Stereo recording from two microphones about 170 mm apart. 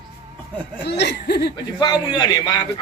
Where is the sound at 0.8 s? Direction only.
75° left (ahead or behind).